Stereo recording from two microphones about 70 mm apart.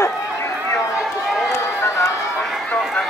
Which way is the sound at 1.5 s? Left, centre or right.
Left.